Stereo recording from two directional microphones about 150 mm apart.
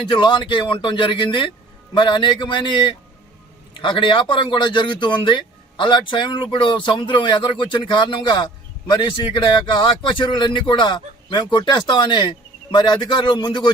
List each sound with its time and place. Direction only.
0.1 s a man's voice: 30° left (ahead or behind)